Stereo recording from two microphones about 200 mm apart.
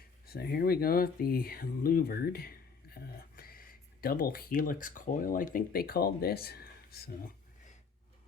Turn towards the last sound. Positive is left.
turn(degrees=50)  # may be behind; listen again after turning